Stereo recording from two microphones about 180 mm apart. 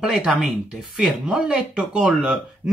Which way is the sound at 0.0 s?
Centre (ahead or behind).